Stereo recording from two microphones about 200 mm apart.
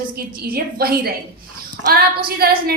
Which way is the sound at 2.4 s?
50° right (ahead or behind).